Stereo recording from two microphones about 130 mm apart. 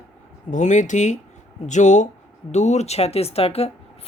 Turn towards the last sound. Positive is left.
turn(degrees=50)  # may be behind; listen again after turning